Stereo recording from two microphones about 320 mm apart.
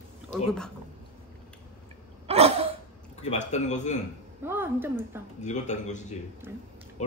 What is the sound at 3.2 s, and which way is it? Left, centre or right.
Speech, left.